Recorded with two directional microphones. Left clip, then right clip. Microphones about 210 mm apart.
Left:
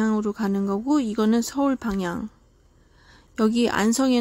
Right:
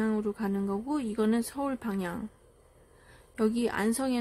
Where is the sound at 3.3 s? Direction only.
35° left (ahead or behind).